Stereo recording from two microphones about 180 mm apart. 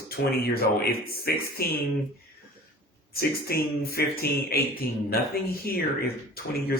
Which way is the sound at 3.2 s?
55° left (ahead or behind).